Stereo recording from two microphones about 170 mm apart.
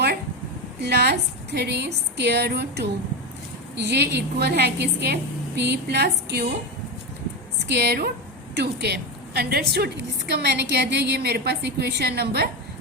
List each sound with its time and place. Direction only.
0.8 s a woman's voice: 75° right (ahead or behind)
7.7 s a woman's voice: 70° right (ahead or behind)